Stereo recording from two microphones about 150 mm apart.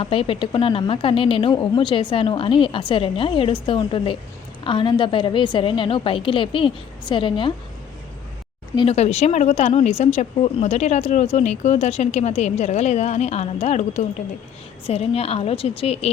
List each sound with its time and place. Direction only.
0.0 s speech: 40° left (ahead or behind)
8.7 s speech: 30° left (ahead or behind)
9.0 s speech: 45° left (ahead or behind)